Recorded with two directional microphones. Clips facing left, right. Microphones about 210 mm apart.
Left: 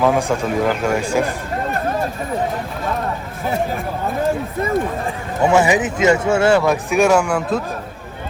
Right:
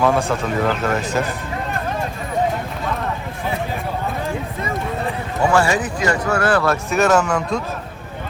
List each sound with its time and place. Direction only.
0.0 s speech: 15° left (ahead or behind)
5.0 s speech: 20° left (ahead or behind)